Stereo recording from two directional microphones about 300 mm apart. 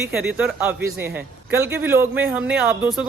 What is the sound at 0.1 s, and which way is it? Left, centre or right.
A man's voice, centre.